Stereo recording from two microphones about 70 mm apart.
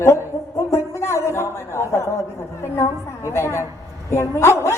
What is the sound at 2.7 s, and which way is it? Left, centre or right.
A woman's voice, left.